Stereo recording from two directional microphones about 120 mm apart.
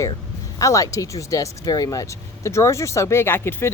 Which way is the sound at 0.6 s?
30° left (ahead or behind).